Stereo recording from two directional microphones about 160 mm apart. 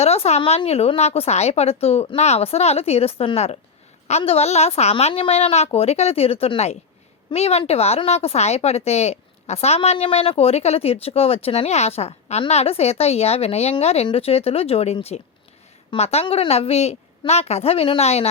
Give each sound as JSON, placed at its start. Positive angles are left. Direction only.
{"t": 0.0, "sound": "a woman's voice", "side_deg": 40}